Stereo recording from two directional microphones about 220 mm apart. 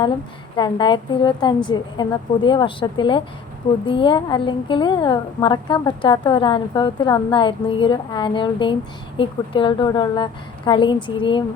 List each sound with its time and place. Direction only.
0.5 s a woman's voice: 20° left (ahead or behind)